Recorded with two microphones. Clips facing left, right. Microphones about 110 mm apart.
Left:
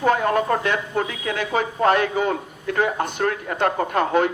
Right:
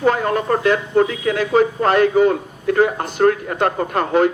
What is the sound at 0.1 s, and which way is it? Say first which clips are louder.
Speech: left 2 dB; 40° right (ahead or behind).